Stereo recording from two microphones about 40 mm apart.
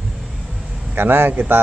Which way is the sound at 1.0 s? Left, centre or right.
Right.